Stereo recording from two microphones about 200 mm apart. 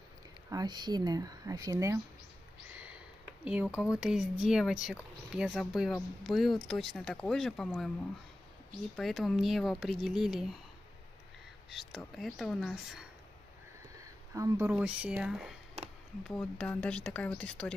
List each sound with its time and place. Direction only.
0.5 s speech: 20° right (ahead or behind)
3.4 s speech: 5° right (ahead or behind)
8.9 s speech: centre (ahead or behind)
11.7 s speech: centre (ahead or behind)
14.3 s speech: 15° right (ahead or behind); by 17.7 s 5° left (ahead or behind)